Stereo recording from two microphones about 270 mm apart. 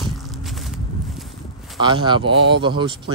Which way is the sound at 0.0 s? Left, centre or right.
Centre.